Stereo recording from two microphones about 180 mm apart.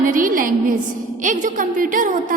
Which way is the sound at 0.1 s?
50° right (ahead or behind).